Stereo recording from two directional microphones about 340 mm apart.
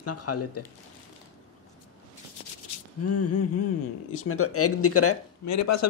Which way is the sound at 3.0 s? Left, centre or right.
Left.